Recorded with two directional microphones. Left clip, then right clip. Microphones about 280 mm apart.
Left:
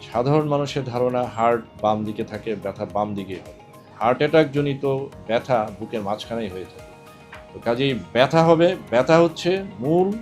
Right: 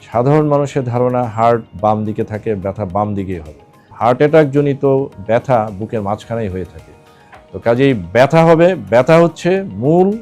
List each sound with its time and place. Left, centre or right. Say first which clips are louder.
0.1 s speech: right 8 dB; right
7.6 s speech: right 9 dB; right